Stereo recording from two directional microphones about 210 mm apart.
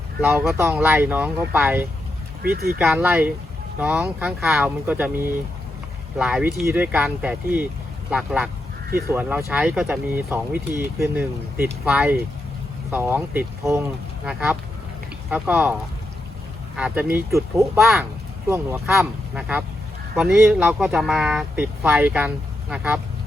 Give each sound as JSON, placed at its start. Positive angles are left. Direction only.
{"t": 0.2, "sound": "speech", "side_deg": -10}
{"t": 2.4, "sound": "speech", "side_deg": -45}
{"t": 2.7, "sound": "speech", "side_deg": -5}
{"t": 17.7, "sound": "speech", "side_deg": 0}
{"t": 18.4, "sound": "speech", "side_deg": -10}